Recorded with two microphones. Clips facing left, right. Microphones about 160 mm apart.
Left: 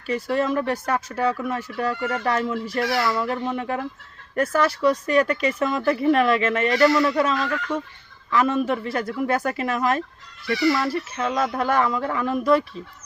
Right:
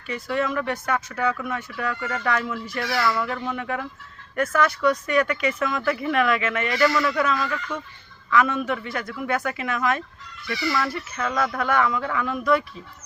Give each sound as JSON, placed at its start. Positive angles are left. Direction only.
{"t": 0.1, "sound": "speech", "side_deg": 35}